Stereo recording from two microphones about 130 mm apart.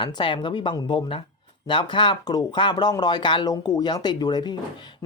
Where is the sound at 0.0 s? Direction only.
40° left (ahead or behind).